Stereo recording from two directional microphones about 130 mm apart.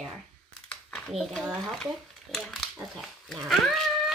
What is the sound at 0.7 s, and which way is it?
A child's voice, 5° left (ahead or behind).